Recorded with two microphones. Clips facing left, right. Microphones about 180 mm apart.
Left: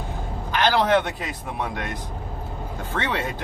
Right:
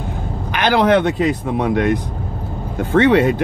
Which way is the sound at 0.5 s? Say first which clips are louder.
Right 5 dB; 70° right (ahead or behind).